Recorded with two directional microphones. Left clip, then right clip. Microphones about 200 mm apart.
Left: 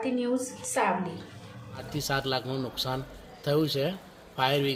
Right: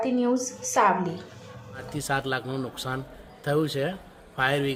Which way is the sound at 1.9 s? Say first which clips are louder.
Right 2 dB; 15° right (ahead or behind).